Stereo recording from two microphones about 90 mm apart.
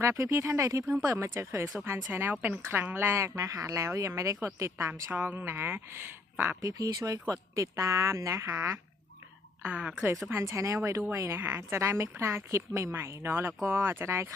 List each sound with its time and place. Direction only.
0.0 s a woman's voice: 30° right (ahead or behind)
6.6 s speech: 40° right (ahead or behind)
9.6 s a woman's voice: 15° right (ahead or behind)
10.2 s speech: 25° right (ahead or behind)
11.4 s a woman's voice: 20° right (ahead or behind)
11.8 s a woman's voice: 30° right (ahead or behind)